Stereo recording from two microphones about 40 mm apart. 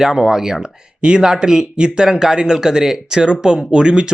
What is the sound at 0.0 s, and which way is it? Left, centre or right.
Speech, centre.